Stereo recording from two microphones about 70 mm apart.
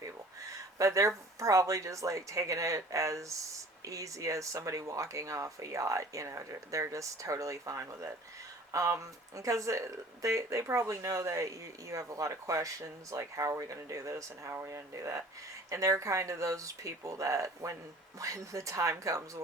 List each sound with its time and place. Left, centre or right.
0.0 s speech: right